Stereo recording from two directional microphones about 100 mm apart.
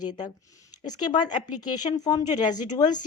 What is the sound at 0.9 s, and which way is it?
A woman's voice, 45° left (ahead or behind).